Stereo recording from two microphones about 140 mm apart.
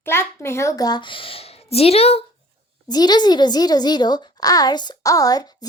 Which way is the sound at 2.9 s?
30° left (ahead or behind).